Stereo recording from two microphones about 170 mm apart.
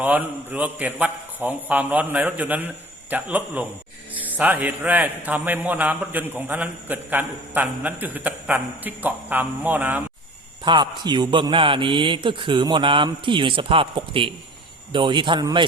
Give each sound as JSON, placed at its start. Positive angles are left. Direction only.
{"t": 0.0, "sound": "a man's voice", "side_deg": -10}
{"t": 10.6, "sound": "a man's voice", "side_deg": -30}